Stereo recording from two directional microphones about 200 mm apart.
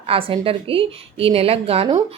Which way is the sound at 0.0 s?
25° right (ahead or behind).